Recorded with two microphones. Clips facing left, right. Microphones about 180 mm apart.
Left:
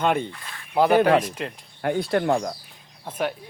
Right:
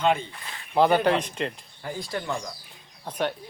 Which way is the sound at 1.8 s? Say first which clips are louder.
Left 10 dB; 65° left (ahead or behind).